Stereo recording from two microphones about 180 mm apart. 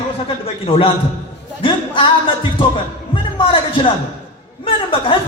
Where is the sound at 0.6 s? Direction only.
30° left (ahead or behind).